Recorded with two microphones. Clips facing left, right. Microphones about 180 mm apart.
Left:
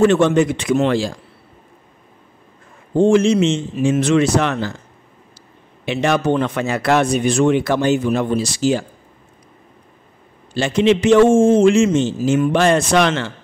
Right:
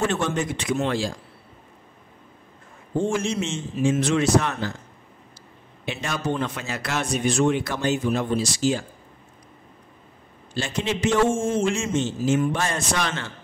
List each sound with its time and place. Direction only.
0.0 s speech: 80° left
2.9 s speech: 75° left (ahead or behind)
5.9 s speech: 70° left (ahead or behind)
10.5 s speech: 75° left (ahead or behind)